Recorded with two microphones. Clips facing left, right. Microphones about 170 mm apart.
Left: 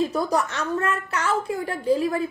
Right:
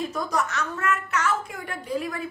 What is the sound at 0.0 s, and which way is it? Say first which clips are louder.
A woman's voice: left 4 dB; 35° left (ahead or behind).